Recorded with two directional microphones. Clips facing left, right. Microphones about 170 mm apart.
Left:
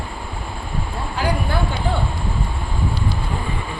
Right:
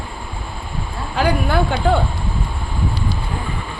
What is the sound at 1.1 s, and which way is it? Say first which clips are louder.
Speech: right 5 dB; 75° right (ahead or behind).